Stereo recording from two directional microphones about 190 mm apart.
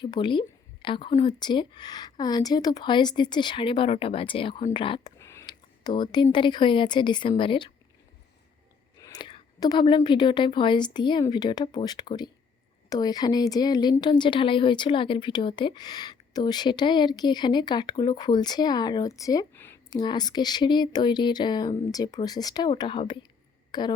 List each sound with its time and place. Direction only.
0.0 s speech: 25° left (ahead or behind)
5.2 s a sound: 15° left (ahead or behind)
6.3 s speech: 25° left (ahead or behind)
9.0 s speech: 20° left (ahead or behind)
19.9 s speech: 20° left (ahead or behind)